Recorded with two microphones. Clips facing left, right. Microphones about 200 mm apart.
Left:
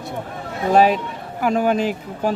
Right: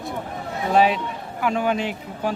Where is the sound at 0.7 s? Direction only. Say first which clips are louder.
Left 3 dB; 45° left (ahead or behind).